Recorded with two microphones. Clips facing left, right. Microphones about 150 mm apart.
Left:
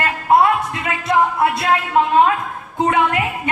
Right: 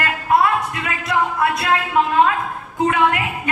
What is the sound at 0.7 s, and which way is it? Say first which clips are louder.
Music: left 3 dB; 30° left (ahead or behind).